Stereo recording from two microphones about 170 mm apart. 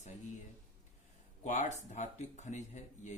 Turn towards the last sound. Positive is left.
turn(degrees=45)  # may be behind; listen again after turning